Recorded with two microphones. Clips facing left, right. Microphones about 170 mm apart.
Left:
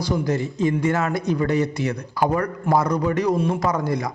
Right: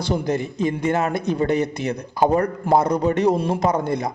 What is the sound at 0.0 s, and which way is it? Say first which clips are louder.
A man's voice: even; 20° right (ahead or behind).